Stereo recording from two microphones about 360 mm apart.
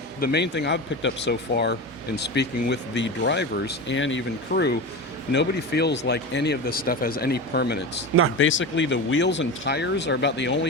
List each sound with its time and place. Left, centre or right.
0.2 s speech: left